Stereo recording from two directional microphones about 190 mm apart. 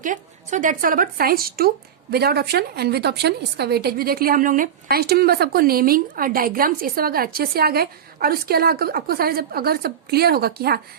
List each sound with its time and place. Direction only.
0.0 s speech: 45° right (ahead or behind)